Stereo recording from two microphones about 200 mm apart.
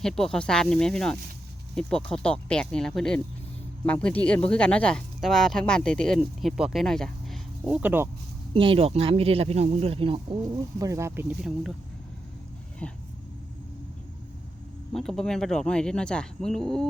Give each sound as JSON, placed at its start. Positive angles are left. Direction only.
{"t": 0.0, "sound": "speech", "side_deg": 0}
{"t": 8.5, "sound": "speech", "side_deg": -25}
{"t": 10.8, "sound": "speech", "side_deg": -15}
{"t": 12.8, "sound": "speech", "side_deg": 5}
{"t": 14.9, "sound": "speech", "side_deg": 0}